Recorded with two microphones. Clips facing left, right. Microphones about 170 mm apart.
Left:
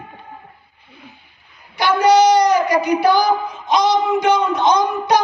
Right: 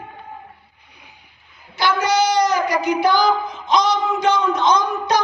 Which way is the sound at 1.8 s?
15° left (ahead or behind).